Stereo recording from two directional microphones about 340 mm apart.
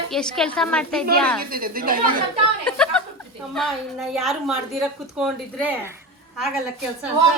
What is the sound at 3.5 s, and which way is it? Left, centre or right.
A woman's voice, centre.